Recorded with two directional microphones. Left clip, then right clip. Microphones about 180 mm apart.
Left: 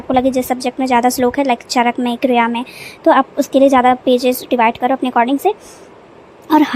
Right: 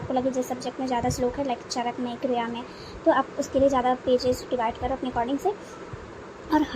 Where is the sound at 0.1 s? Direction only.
50° left (ahead or behind).